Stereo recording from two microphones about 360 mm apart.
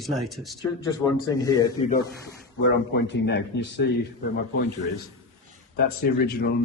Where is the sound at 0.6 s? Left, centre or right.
Centre.